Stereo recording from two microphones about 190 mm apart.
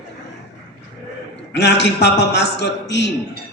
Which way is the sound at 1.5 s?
65° left (ahead or behind).